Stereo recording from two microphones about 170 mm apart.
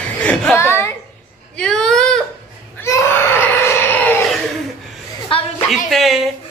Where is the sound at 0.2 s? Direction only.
5° left (ahead or behind).